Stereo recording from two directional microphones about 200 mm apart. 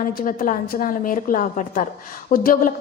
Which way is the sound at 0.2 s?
45° left (ahead or behind).